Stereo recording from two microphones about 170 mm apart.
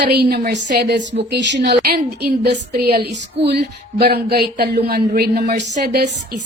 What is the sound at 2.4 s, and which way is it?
A woman's voice, 70° right (ahead or behind).